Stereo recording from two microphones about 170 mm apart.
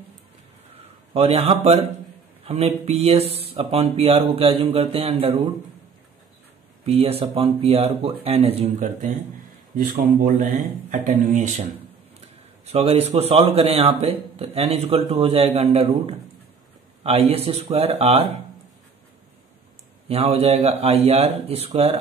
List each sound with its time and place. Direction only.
0.7 s a man's voice: 35° right (ahead or behind)
6.9 s speech: 35° right (ahead or behind)
9.9 s speech: 50° right (ahead or behind)
12.6 s speech: 35° right (ahead or behind)
20.1 s speech: 35° right (ahead or behind)